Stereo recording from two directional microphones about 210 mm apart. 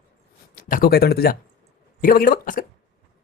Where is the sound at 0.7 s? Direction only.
45° left (ahead or behind).